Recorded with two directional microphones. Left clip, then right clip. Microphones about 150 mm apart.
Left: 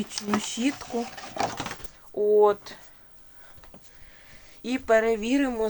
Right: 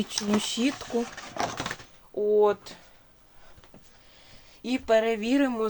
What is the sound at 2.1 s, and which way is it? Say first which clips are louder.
Speech: left 2 dB; 5° right (ahead or behind).